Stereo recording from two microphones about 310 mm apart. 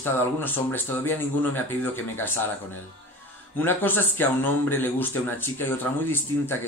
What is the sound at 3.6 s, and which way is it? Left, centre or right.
Speech, centre.